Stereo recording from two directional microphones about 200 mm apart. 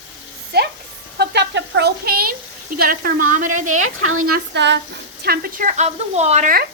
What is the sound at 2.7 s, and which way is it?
Speech, 45° right (ahead or behind).